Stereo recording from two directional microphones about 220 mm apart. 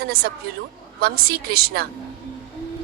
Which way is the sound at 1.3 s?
45° right (ahead or behind).